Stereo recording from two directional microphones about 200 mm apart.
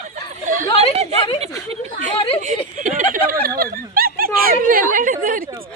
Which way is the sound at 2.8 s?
40° right (ahead or behind).